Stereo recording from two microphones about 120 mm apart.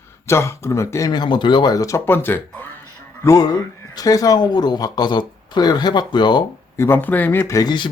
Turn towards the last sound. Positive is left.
turn(degrees=40)  # may be behind; listen again after turning